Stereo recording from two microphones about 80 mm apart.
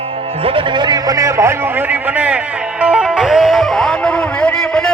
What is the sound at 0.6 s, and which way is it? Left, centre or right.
Speech, right.